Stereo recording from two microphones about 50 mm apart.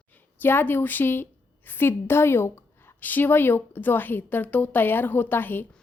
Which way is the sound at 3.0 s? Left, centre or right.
Left.